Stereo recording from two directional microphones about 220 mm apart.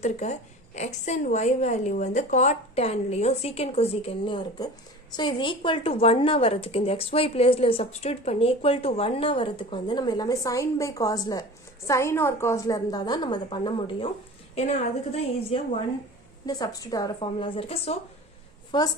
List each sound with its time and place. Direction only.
0.0 s a woman's voice: 30° left (ahead or behind)